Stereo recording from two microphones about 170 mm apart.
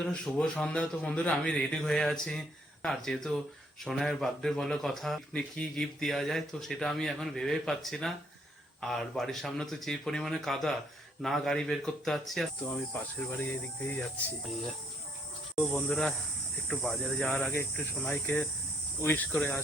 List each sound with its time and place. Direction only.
0.0 s speech: 5° left (ahead or behind)
15.5 s speech: centre (ahead or behind)
17.5 s speech: 15° left (ahead or behind)
17.9 s speech: centre (ahead or behind)